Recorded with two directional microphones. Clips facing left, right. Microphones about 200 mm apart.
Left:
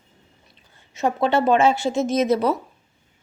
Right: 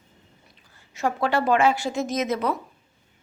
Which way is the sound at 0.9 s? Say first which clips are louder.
Left 4 dB; 20° left (ahead or behind).